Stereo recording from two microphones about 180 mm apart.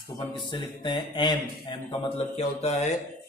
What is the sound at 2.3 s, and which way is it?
Mantra, 35° left (ahead or behind).